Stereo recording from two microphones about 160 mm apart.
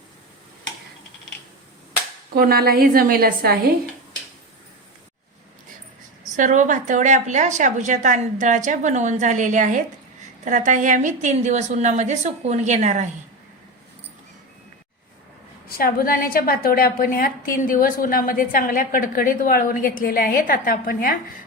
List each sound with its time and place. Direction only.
2.3 s a woman's voice: 70° right (ahead or behind)
6.3 s a woman's voice: 50° right (ahead or behind)
15.8 s a woman's voice: 65° left (ahead or behind)